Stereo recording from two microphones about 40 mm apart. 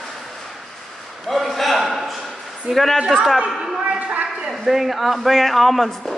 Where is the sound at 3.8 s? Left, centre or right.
Right.